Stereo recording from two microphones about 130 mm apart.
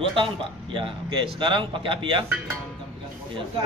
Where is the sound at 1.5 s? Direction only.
40° right (ahead or behind).